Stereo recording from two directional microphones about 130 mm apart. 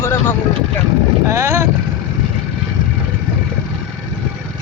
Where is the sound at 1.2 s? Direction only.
20° right (ahead or behind).